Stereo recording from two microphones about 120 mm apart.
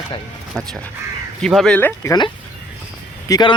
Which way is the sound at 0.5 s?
5° left (ahead or behind).